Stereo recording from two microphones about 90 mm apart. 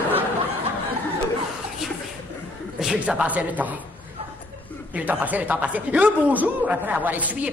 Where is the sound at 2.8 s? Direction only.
10° right (ahead or behind).